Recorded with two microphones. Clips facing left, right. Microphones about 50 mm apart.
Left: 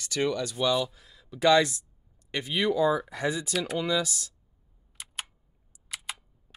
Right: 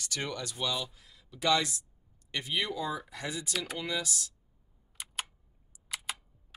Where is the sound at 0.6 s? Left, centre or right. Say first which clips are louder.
Left 8 dB; left.